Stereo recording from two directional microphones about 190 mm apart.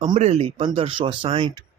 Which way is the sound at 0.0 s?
40° right (ahead or behind).